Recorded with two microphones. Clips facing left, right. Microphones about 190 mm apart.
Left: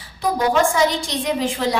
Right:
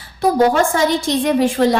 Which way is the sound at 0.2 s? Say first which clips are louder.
Right 4 dB; 50° right (ahead or behind).